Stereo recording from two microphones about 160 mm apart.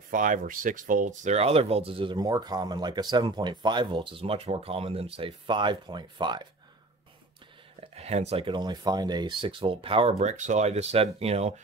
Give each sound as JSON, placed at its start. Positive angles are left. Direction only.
{"t": 0.1, "sound": "speech", "side_deg": -55}
{"t": 7.9, "sound": "speech", "side_deg": -40}
{"t": 10.1, "sound": "speech", "side_deg": -50}